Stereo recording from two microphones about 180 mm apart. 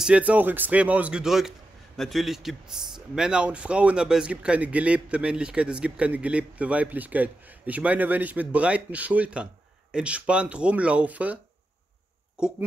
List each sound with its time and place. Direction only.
0.0 s a man's voice: 5° right (ahead or behind)
12.4 s speech: 5° right (ahead or behind)